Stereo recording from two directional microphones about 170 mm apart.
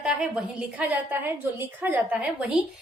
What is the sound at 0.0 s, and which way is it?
A woman's voice, 5° right (ahead or behind).